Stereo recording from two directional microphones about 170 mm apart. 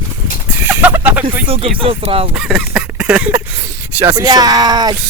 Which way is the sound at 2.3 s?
5° right (ahead or behind).